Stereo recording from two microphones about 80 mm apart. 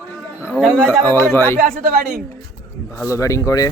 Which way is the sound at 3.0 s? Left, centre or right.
Left.